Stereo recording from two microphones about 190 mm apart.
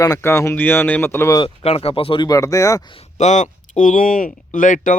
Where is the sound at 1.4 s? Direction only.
30° left (ahead or behind).